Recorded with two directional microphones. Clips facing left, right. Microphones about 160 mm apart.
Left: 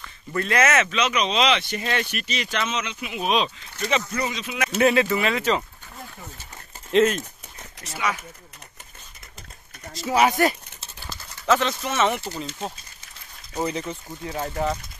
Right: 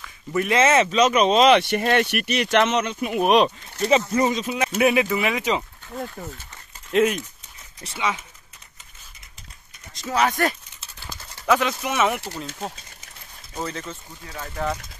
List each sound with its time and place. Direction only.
0.0 s a sound: 5° right (ahead or behind)
0.5 s speech: 30° right (ahead or behind); by 1.6 s 50° right (ahead or behind)
1.6 s speech: 60° right (ahead or behind)
2.8 s speech: 50° right (ahead or behind)
3.7 s speech: 30° right (ahead or behind)
4.2 s speech: 45° right (ahead or behind)
4.7 s speech: 10° right (ahead or behind)
6.9 s speech: 10° right (ahead or behind)
7.8 s speech: 25° right (ahead or behind)
9.9 s speech: 10° left (ahead or behind)
11.1 s speech: 10° right (ahead or behind)
13.6 s speech: 15° left (ahead or behind)